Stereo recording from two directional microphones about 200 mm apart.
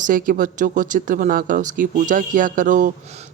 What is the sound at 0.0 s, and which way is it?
Speech, 45° right (ahead or behind).